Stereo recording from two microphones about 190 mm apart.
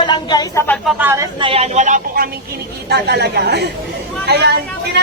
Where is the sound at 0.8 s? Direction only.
10° right (ahead or behind).